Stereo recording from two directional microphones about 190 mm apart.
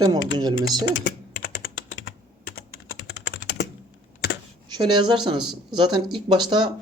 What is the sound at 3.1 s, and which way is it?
Typing, 60° left (ahead or behind).